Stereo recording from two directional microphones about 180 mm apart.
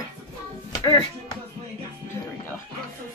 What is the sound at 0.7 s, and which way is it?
Music, 20° left (ahead or behind).